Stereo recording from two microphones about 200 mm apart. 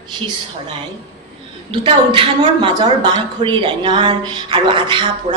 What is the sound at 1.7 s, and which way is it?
A woman's voice, 25° right (ahead or behind).